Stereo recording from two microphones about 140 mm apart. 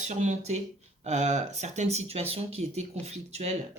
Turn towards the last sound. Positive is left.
turn(degrees=-50)  # may be behind; listen again after turning